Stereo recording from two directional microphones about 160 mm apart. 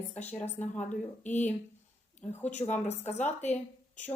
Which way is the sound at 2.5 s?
45° left (ahead or behind).